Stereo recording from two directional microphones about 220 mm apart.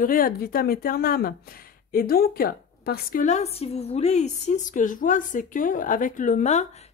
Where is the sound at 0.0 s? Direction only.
40° left (ahead or behind).